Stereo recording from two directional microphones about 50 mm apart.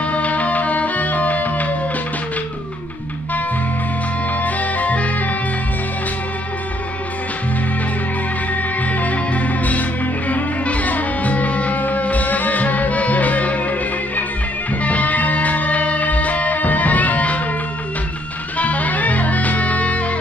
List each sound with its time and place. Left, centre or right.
0.0 s music: left
4.4 s music: left
8.8 s music: left
18.6 s music: left